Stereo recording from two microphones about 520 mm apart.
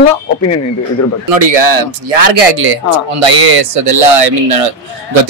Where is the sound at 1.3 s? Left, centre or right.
Right.